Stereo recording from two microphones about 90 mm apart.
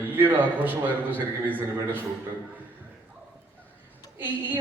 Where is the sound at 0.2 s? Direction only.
20° right (ahead or behind).